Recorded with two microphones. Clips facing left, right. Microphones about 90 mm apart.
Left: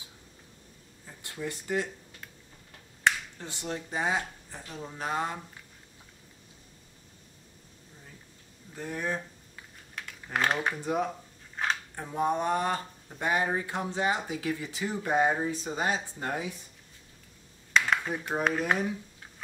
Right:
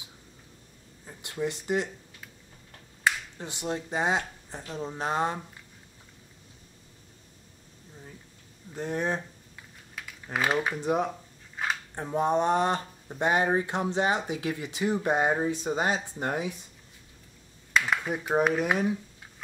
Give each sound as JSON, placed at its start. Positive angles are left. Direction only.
{"t": 1.0, "sound": "speech", "side_deg": -20}
{"t": 3.3, "sound": "speech", "side_deg": -15}
{"t": 8.7, "sound": "speech", "side_deg": -25}
{"t": 9.6, "sound": "typing", "side_deg": -5}
{"t": 10.8, "sound": "speech", "side_deg": -20}
{"t": 11.6, "sound": "a sound", "side_deg": -5}
{"t": 11.9, "sound": "speech", "side_deg": -25}
{"t": 17.7, "sound": "a sound", "side_deg": -5}